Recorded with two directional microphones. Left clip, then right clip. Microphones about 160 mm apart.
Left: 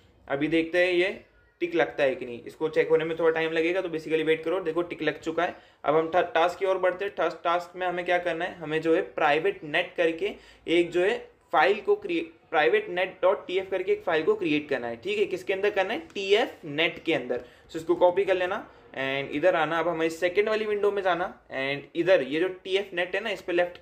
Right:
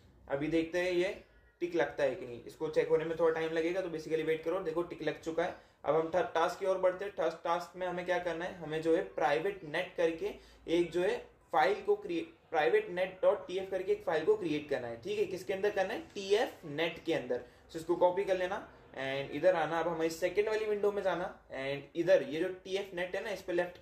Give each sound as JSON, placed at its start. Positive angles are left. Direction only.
{"t": 0.3, "sound": "speech", "side_deg": 15}